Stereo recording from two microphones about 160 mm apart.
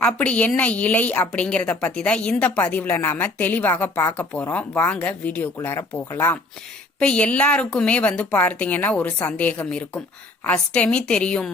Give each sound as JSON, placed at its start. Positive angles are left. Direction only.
{"t": 0.0, "sound": "a woman's voice", "side_deg": 10}